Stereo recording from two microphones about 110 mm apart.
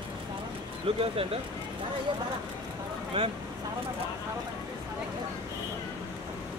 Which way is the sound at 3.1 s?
55° right (ahead or behind).